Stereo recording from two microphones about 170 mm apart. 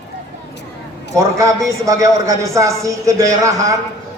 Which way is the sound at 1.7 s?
20° right (ahead or behind).